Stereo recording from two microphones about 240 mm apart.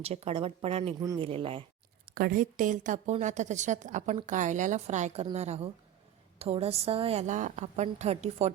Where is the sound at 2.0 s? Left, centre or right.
Right.